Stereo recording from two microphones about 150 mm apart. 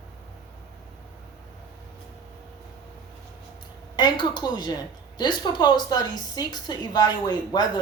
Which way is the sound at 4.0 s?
30° left (ahead or behind).